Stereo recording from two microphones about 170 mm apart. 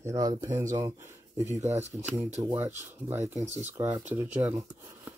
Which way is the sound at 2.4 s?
10° right (ahead or behind).